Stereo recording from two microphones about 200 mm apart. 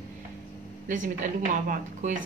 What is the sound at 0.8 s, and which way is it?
A woman's voice, 40° right (ahead or behind).